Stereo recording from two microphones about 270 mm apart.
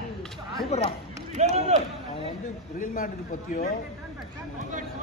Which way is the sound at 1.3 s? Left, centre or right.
Right.